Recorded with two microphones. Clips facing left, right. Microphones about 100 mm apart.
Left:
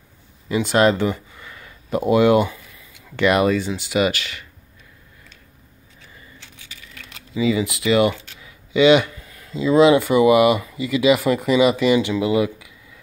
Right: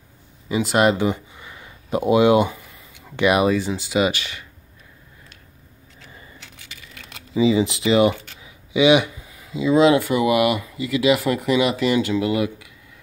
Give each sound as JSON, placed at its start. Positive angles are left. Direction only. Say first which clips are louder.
{"t": 0.6, "sound": "speech", "louder": "left 1 dB", "side_deg": -10}
{"t": 7.3, "sound": "speech", "louder": "right 3 dB", "side_deg": -25}